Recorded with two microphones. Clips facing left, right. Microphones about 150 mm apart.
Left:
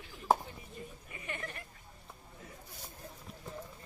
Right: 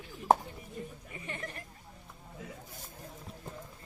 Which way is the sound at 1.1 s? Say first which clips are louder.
Even; 30° right (ahead or behind).